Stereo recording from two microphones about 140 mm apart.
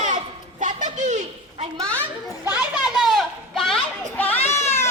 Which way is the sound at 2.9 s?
Centre (ahead or behind).